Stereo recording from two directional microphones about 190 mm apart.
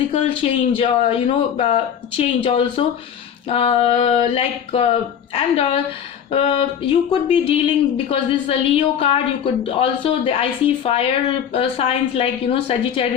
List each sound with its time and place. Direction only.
0.1 s a woman's voice: 30° left (ahead or behind)
3.5 s a sound: 30° left (ahead or behind)
6.3 s a woman's voice: 30° left (ahead or behind)